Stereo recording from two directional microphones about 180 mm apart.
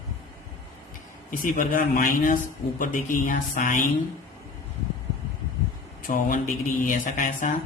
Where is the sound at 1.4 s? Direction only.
50° left (ahead or behind).